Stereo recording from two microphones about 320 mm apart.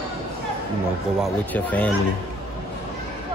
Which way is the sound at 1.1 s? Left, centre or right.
Centre.